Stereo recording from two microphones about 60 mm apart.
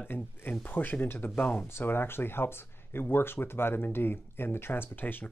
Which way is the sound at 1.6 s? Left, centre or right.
Left.